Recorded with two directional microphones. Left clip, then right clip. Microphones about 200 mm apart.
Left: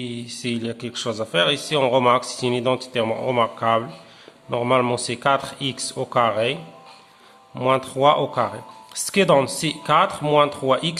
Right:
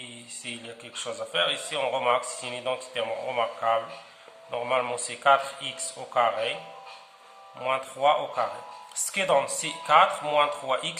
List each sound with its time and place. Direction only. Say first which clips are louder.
0.0 s a man's voice: left 9 dB; 50° left (ahead or behind)
7.6 s a man's voice: left 7 dB; 50° left (ahead or behind)